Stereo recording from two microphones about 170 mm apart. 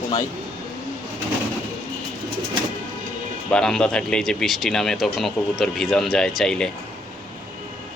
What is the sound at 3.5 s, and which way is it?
Speech, 5° left (ahead or behind).